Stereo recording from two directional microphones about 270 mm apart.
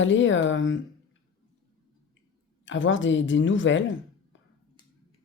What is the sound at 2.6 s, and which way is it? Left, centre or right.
Speech, left.